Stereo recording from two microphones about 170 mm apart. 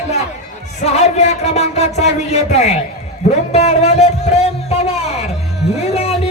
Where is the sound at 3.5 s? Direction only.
40° left (ahead or behind).